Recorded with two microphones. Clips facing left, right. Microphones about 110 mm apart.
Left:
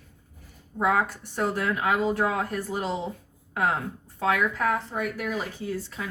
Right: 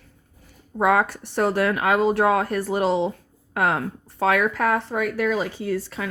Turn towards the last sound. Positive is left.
turn(degrees=-70)  # may be behind; listen again after turning